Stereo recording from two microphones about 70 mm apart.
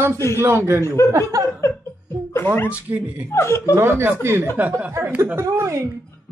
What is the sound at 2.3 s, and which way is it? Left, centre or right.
Speech, left.